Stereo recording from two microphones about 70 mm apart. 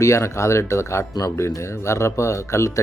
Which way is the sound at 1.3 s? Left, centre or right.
Left.